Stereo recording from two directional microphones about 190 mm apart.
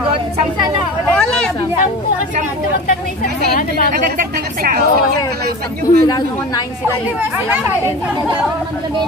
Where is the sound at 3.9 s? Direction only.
45° right (ahead or behind).